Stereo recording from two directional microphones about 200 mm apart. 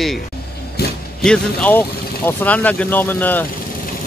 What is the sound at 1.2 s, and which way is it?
Speech, 5° left (ahead or behind).